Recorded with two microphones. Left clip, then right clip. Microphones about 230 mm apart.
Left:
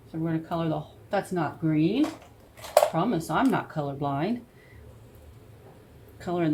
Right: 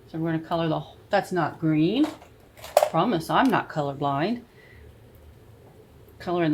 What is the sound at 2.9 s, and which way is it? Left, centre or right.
Speech, right.